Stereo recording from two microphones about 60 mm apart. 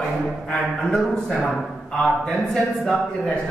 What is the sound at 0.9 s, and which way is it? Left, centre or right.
Speech, centre.